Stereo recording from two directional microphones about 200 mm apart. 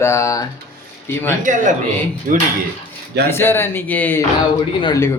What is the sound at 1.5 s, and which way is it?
Speech, 40° right (ahead or behind).